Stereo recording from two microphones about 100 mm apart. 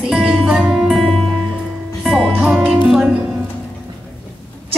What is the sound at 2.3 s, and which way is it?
Music, 10° right (ahead or behind).